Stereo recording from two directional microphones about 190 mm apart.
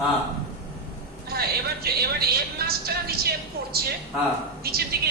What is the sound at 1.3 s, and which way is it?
A woman's voice, 55° right (ahead or behind).